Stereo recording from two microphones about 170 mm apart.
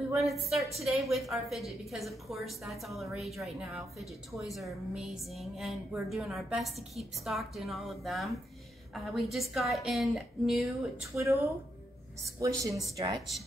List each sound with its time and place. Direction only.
0.1 s a woman's voice: centre (ahead or behind)
12.2 s a woman's voice: 20° right (ahead or behind)